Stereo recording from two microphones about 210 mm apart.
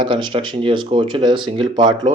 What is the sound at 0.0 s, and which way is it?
Speech, 20° right (ahead or behind).